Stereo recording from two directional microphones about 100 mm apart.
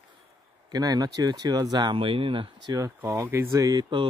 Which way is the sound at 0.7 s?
40° right (ahead or behind).